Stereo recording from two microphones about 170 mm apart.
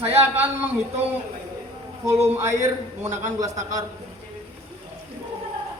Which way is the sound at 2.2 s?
15° right (ahead or behind).